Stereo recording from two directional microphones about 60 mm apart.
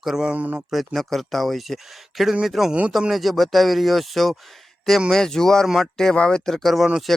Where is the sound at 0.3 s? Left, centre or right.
Right.